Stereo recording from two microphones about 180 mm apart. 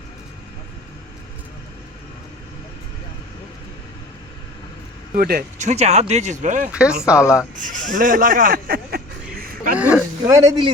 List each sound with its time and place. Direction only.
5.1 s speech: 55° right (ahead or behind)
5.5 s speech: 40° right (ahead or behind)
6.7 s speech: 5° right (ahead or behind)
7.2 s speech: 15° left (ahead or behind)
7.5 s a sound: 45° right (ahead or behind)
9.7 s a sound: 5° right (ahead or behind)
10.2 s speech: 20° right (ahead or behind)